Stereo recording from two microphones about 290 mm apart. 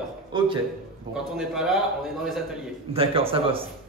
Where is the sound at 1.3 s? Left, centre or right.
Centre.